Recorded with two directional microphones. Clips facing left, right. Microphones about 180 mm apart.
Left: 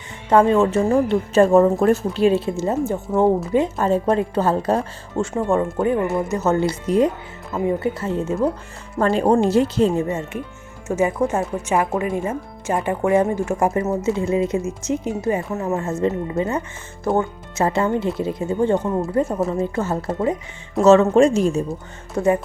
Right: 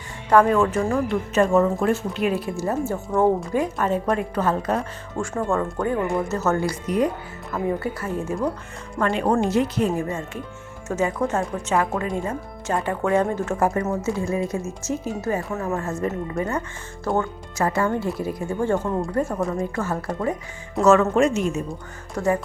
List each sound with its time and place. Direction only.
0.3 s speech: 25° left (ahead or behind)
6.0 s speech: 10° left (ahead or behind); by 21.6 s 35° left (ahead or behind)
22.1 s speech: 20° left (ahead or behind)